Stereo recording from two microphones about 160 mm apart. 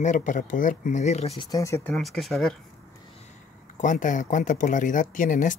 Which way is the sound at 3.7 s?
55° left (ahead or behind).